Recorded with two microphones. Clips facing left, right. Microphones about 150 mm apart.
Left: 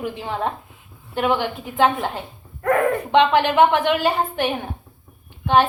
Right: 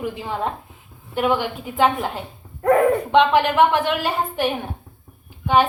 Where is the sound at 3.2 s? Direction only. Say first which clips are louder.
Left 1 dB; centre (ahead or behind).